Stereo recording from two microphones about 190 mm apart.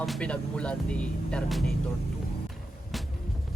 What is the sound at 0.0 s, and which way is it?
Speech, 5° left (ahead or behind).